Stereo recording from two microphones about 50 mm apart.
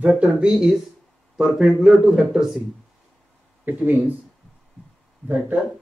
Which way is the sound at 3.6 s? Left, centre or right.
Right.